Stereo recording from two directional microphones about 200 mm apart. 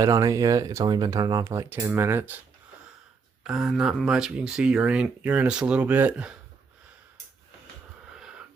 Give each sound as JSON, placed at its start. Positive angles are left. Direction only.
{"t": 0.0, "sound": "speech", "side_deg": -15}
{"t": 3.4, "sound": "speech", "side_deg": 0}
{"t": 8.1, "sound": "wheeze", "side_deg": -5}